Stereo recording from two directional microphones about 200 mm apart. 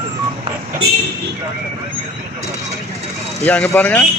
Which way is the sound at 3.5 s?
10° left (ahead or behind).